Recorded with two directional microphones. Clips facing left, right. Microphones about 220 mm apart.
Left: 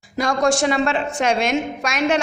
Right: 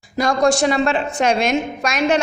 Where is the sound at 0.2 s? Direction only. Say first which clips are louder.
Right 2 dB; 35° right (ahead or behind).